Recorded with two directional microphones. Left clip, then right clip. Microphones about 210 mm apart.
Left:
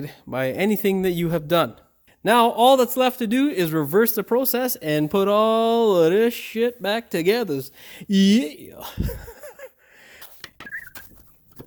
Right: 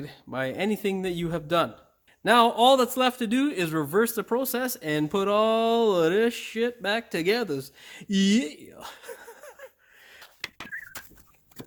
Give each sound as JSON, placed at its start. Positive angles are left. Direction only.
{"t": 0.0, "sound": "a man's voice", "side_deg": 40}
{"t": 2.2, "sound": "a man's voice", "side_deg": 25}